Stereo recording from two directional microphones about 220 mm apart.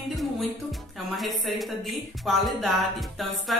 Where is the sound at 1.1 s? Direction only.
Centre (ahead or behind).